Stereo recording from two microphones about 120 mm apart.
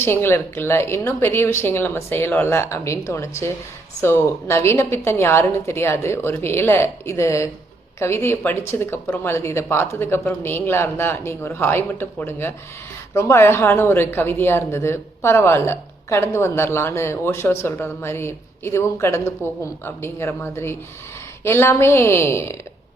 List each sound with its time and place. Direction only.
0.0 s speech: 20° left (ahead or behind)